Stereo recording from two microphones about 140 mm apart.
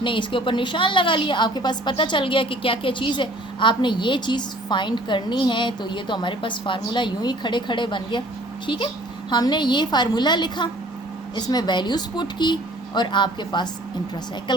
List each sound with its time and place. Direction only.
0.0 s a woman's voice: 35° left (ahead or behind)